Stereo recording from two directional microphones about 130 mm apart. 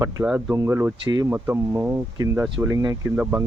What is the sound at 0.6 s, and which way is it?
Speech, 20° right (ahead or behind).